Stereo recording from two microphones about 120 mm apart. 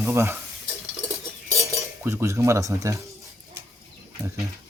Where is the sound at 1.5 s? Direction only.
25° right (ahead or behind).